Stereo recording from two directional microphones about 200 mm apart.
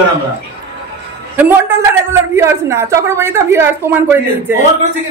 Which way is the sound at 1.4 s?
10° right (ahead or behind).